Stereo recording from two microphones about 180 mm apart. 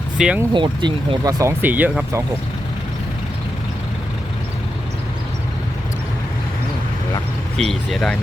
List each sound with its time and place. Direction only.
0.2 s speech: 5° right (ahead or behind)
0.5 s speech: 25° right (ahead or behind); by 2.2 s 10° right (ahead or behind)
7.5 s speech: centre (ahead or behind)